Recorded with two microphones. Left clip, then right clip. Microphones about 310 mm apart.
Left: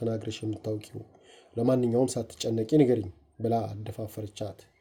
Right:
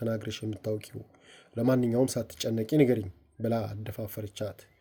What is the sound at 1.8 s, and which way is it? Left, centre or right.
Speech, right.